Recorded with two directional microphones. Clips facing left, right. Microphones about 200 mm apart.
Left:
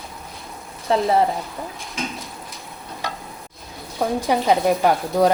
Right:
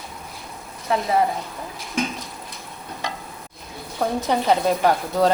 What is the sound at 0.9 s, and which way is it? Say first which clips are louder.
Speech: left 4 dB; 30° left (ahead or behind).